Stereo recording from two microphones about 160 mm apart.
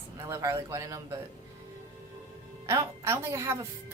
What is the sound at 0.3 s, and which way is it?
Speech, 20° right (ahead or behind).